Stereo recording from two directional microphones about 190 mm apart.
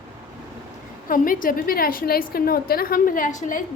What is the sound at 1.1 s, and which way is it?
A woman's voice, 45° left (ahead or behind).